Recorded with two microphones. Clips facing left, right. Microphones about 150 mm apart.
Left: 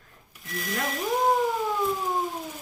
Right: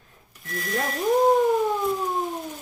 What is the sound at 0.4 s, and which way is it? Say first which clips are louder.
Speech: right 3 dB; centre (ahead or behind).